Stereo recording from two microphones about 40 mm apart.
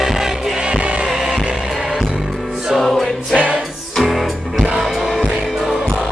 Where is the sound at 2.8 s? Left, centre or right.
Centre.